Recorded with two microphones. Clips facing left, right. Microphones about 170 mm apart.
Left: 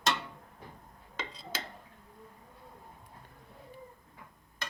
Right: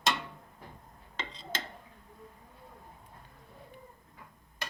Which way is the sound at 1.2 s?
10° left (ahead or behind).